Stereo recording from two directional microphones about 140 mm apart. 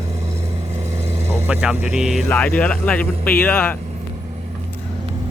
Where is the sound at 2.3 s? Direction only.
10° left (ahead or behind).